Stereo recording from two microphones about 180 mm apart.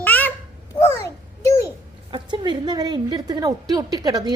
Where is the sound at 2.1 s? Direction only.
25° right (ahead or behind).